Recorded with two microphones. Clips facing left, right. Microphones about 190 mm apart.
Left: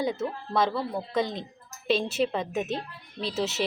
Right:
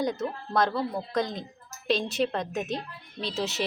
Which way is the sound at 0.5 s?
Centre (ahead or behind).